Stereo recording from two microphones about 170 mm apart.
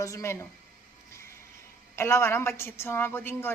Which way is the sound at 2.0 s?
15° left (ahead or behind).